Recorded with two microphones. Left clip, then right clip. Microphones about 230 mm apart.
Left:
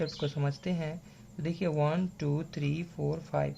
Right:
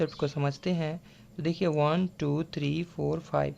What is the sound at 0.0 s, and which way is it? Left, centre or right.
Speech, right.